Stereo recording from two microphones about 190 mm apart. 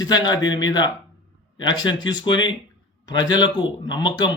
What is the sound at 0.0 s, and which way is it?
A man's voice, 20° left (ahead or behind).